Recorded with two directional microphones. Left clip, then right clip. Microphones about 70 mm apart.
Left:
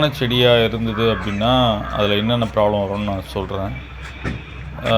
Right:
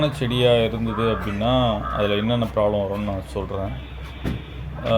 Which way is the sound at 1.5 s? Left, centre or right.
Left.